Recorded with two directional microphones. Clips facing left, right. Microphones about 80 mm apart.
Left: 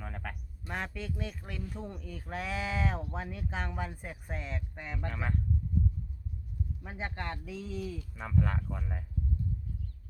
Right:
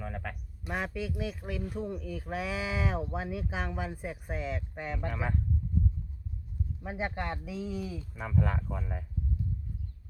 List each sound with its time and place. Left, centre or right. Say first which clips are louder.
0.0 s speech: right 3 dB; centre
6.8 s speech: right 5 dB; centre
8.1 s speech: right 1 dB; centre